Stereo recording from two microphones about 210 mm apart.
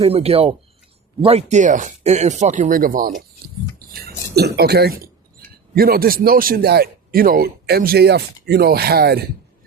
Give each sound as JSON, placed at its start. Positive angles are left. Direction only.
{"t": 0.0, "sound": "speech", "side_deg": -30}
{"t": 3.4, "sound": "a sound", "side_deg": -45}
{"t": 5.7, "sound": "a man's voice", "side_deg": -45}